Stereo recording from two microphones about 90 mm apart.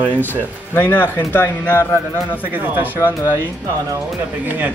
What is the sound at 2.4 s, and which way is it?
Speech, 20° right (ahead or behind).